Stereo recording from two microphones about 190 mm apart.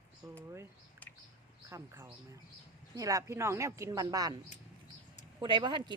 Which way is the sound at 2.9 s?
15° right (ahead or behind).